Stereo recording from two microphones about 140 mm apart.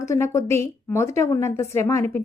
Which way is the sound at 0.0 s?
20° left (ahead or behind).